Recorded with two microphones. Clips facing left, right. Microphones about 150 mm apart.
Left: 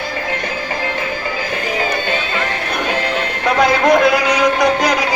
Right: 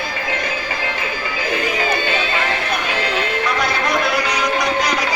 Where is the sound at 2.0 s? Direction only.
45° left (ahead or behind).